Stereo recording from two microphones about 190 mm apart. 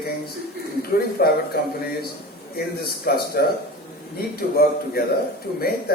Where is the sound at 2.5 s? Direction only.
55° left (ahead or behind).